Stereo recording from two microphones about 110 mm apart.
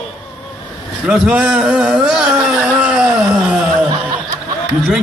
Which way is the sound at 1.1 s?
10° right (ahead or behind).